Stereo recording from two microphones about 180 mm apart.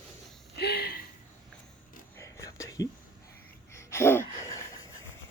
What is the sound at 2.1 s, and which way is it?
Whispering, 15° left (ahead or behind).